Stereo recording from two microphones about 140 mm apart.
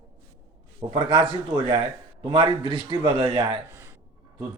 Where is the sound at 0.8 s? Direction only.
35° right (ahead or behind).